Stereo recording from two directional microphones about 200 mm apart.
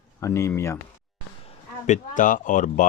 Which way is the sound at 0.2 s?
15° left (ahead or behind).